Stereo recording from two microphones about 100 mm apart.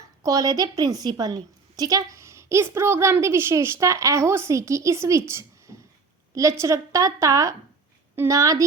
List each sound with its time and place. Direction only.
0.2 s a woman's voice: 35° right (ahead or behind)